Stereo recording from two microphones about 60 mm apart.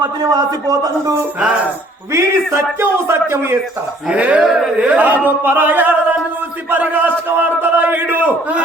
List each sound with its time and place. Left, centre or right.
0.7 s a man's voice: right
2.1 s a man's voice: right
2.8 s speech: right
4.1 s speech: right
4.4 s speech: centre
4.9 s speech: right